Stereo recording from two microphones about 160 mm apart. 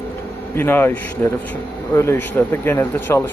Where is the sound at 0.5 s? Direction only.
15° left (ahead or behind).